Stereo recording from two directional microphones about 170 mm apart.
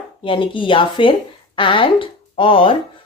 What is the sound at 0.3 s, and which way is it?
Speech, 30° left (ahead or behind).